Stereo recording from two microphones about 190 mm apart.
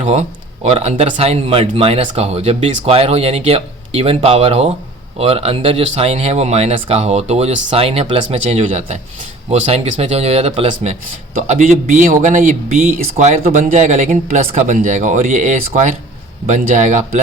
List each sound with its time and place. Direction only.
0.0 s speech: 35° right (ahead or behind)